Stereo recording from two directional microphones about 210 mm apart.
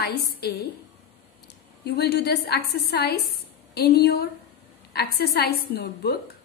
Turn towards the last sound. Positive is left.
turn(degrees=50)  # may be behind; listen again after turning